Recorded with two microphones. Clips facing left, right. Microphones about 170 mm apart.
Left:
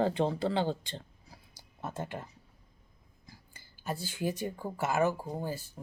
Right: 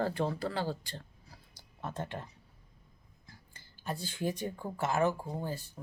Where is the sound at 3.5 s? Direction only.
5° left (ahead or behind).